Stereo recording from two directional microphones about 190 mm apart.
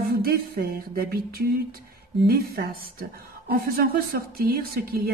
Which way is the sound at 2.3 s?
55° right (ahead or behind).